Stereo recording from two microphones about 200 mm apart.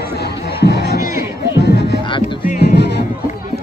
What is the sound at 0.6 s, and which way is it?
Music, 55° left (ahead or behind).